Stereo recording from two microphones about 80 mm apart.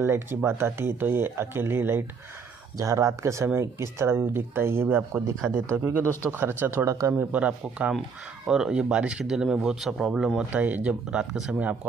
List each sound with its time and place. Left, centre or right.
0.0 s speech: right
2.8 s speech: right
7.2 s speech: centre
10.5 s speech: centre